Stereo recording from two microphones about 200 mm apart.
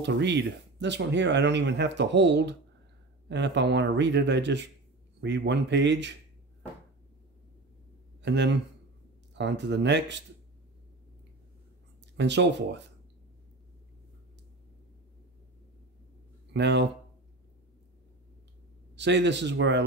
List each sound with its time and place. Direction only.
0.0 s speech: 60° right (ahead or behind)
8.2 s speech: 60° right (ahead or behind)
12.2 s speech: 60° right (ahead or behind)
16.5 s speech: 60° right (ahead or behind)
18.9 s speech: 60° right (ahead or behind)